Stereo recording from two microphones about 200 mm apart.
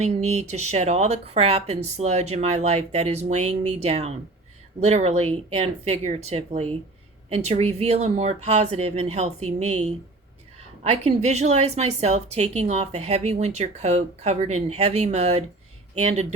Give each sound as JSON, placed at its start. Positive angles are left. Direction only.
{"t": 0.3, "sound": "a woman's voice", "side_deg": -35}
{"t": 10.8, "sound": "a woman's voice", "side_deg": -35}